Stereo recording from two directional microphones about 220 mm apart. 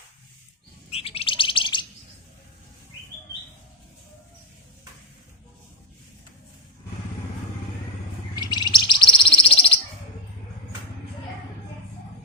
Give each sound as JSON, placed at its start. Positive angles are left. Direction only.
{"t": 0.9, "sound": "bird", "side_deg": 25}
{"t": 8.4, "sound": "bird", "side_deg": 20}